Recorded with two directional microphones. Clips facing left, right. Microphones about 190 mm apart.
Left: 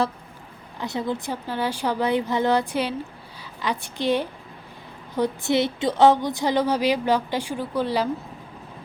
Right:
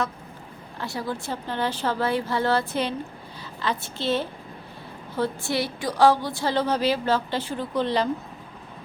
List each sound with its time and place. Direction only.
0.8 s a woman's voice: 20° left (ahead or behind)